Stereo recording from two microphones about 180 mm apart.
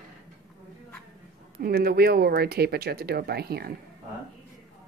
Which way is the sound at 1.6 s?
60° right (ahead or behind).